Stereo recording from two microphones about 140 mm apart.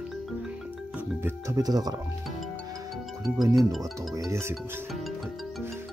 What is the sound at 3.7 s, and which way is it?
Speech, centre (ahead or behind).